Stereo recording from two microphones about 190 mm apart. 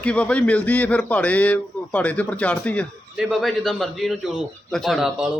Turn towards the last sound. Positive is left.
turn(degrees=-5)  # may be behind; listen again after turning